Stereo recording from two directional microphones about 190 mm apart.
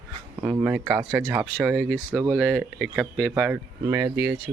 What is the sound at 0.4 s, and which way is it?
Speech, 10° right (ahead or behind).